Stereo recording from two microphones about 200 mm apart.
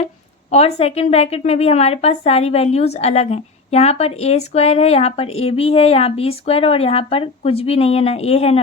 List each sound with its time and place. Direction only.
0.5 s a woman's voice: 30° left (ahead or behind)